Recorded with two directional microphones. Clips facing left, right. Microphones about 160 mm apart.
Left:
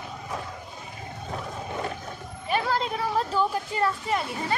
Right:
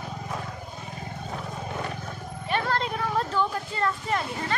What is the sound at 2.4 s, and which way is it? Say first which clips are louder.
Speech: left 1 dB; 5° left (ahead or behind).